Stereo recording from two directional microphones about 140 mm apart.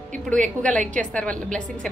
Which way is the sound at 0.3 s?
5° left (ahead or behind).